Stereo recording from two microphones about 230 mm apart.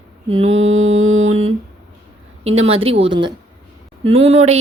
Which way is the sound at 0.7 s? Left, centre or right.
Right.